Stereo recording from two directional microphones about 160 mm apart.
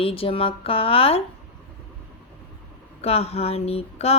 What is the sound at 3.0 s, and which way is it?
A woman's voice, 40° left (ahead or behind).